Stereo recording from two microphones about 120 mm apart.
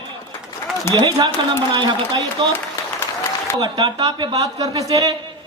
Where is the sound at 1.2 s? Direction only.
40° right (ahead or behind).